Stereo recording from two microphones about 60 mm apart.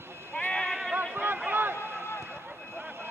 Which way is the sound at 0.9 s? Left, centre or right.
Right.